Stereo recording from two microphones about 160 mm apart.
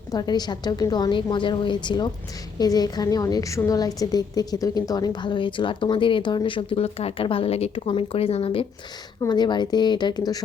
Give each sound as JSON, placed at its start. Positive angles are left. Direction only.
{"t": 0.1, "sound": "a woman's voice", "side_deg": 25}